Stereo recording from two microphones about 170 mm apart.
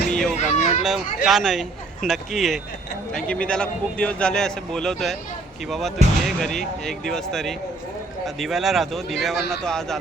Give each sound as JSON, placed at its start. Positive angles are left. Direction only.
{"t": 0.1, "sound": "a sound", "side_deg": 0}
{"t": 0.3, "sound": "speech", "side_deg": 45}
{"t": 0.8, "sound": "a man's voice", "side_deg": 0}